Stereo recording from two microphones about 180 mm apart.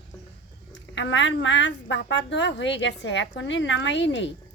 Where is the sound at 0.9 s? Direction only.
90° left.